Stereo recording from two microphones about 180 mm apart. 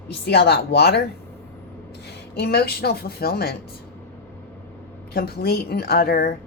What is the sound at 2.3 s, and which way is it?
Speech, 60° left (ahead or behind).